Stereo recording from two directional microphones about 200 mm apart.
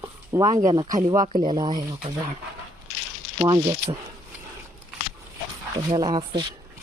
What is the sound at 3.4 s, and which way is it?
Speech, 15° right (ahead or behind).